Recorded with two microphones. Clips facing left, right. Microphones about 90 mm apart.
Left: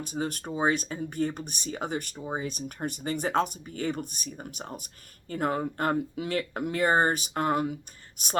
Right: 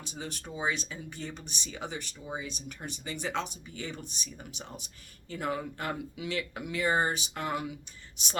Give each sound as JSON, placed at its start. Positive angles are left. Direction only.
{"t": 0.0, "sound": "speech", "side_deg": 45}